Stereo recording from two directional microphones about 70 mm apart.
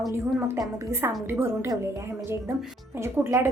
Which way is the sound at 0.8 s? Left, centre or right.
Right.